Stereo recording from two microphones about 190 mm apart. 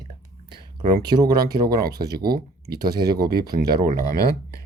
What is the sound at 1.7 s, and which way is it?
Speech, 55° right (ahead or behind).